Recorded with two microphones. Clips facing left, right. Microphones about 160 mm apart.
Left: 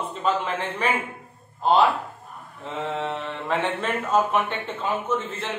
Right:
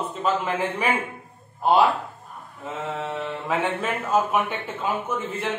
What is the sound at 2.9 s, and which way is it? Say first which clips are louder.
Speech: even; 10° right (ahead or behind).